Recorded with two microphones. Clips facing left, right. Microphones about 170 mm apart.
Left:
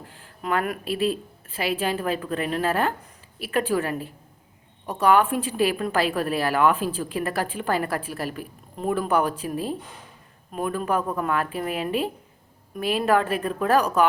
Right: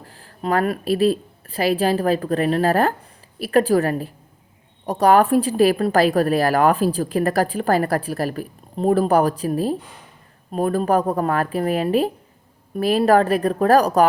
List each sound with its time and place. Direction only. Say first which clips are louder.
0.1 s a woman's voice: right 5 dB; 35° right (ahead or behind)